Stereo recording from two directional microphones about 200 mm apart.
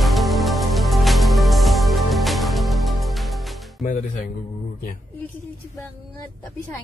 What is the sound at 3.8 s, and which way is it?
Speech, 40° left (ahead or behind).